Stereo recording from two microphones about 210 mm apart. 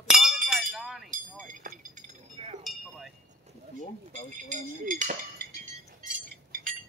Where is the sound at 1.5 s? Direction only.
40° right (ahead or behind).